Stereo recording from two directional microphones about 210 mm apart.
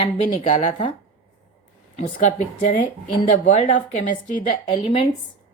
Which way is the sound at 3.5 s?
35° left (ahead or behind).